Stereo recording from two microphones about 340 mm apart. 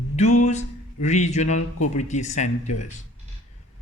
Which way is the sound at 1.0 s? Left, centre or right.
Centre.